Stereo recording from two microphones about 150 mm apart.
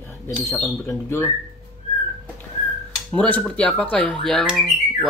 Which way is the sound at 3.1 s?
10° left (ahead or behind).